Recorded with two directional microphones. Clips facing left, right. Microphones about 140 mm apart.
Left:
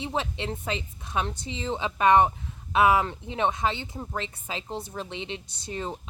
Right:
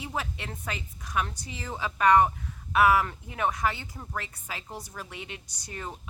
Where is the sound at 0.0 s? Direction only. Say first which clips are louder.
Left 5 dB; 25° left (ahead or behind).